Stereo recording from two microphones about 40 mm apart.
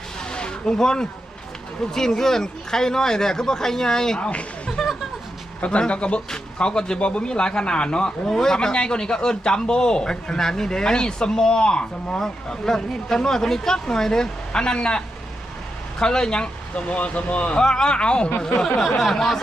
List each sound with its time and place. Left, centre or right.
0.2 s a sound: left
1.9 s speech: centre
4.2 s a man's voice: left
16.7 s speech: left
17.6 s a man's voice: centre
18.8 s speech: centre